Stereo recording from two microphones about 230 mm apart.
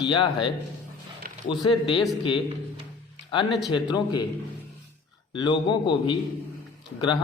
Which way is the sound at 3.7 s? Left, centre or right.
Centre.